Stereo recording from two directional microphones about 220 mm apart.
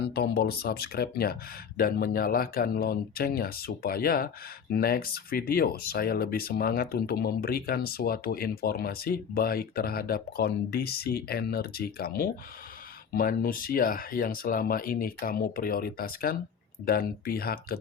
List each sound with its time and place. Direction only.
0.1 s speech: 45° left (ahead or behind)